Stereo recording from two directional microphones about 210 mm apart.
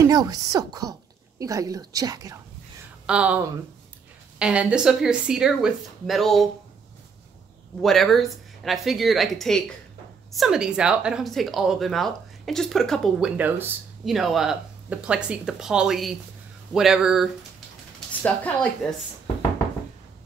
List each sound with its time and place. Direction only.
0.0 s speech: 15° right (ahead or behind)
3.1 s speech: 5° right (ahead or behind)
7.8 s speech: centre (ahead or behind)